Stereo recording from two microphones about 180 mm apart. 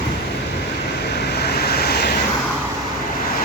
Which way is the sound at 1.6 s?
60° left (ahead or behind).